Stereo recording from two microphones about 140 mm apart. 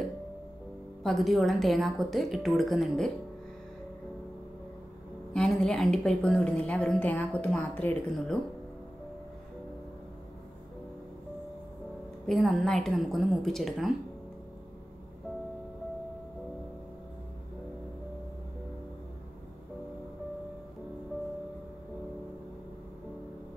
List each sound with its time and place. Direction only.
1.0 s a woman's voice: centre (ahead or behind)
5.3 s a woman's voice: 5° left (ahead or behind)
12.3 s a woman's voice: centre (ahead or behind)